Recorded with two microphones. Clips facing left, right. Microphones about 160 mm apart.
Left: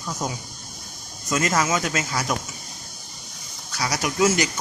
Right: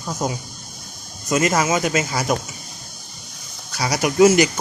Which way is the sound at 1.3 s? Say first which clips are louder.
Right 4 dB; 10° right (ahead or behind).